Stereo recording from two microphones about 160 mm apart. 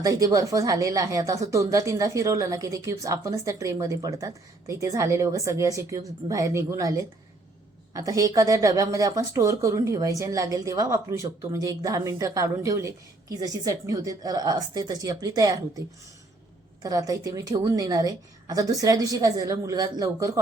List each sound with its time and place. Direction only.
0.0 s a woman's voice: 20° right (ahead or behind)
16.8 s a woman's voice: 20° right (ahead or behind)